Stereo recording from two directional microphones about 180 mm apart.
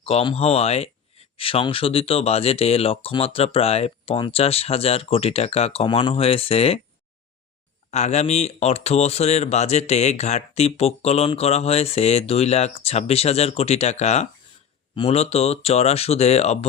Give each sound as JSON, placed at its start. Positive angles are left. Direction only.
{"t": 0.0, "sound": "speech", "side_deg": 30}
{"t": 7.9, "sound": "speech", "side_deg": 40}